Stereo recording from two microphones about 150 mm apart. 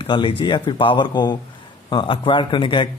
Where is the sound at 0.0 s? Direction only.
35° left (ahead or behind).